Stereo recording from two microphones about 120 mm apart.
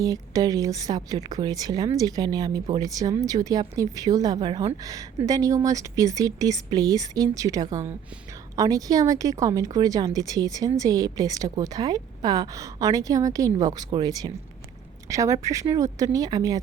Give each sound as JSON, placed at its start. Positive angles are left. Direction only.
{"t": 0.0, "sound": "a woman's voice", "side_deg": -30}